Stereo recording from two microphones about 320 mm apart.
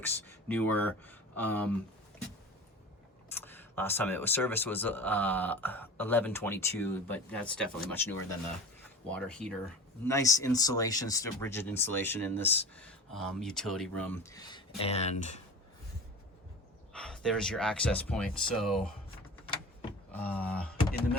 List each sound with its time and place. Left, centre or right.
0.0 s speech: centre
3.3 s speech: centre
16.9 s speech: centre
20.1 s speech: centre